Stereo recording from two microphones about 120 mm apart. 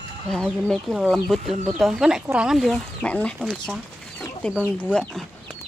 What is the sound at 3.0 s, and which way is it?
Speech, 10° left (ahead or behind).